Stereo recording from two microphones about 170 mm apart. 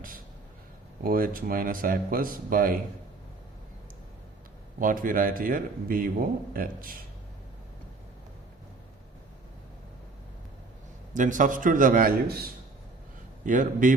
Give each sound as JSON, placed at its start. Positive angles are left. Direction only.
{"t": 1.0, "sound": "a man's voice", "side_deg": -55}
{"t": 4.8, "sound": "a man's voice", "side_deg": -50}
{"t": 11.1, "sound": "a man's voice", "side_deg": -50}